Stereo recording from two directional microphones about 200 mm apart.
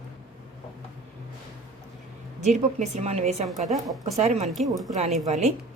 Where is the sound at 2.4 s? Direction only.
35° right (ahead or behind).